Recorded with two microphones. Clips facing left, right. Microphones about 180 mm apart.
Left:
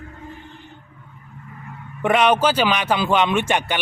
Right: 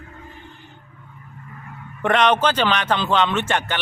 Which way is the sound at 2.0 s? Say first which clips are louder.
Left 1 dB; 5° left (ahead or behind).